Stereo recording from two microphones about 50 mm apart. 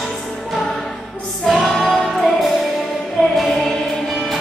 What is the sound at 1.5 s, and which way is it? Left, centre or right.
Music, centre.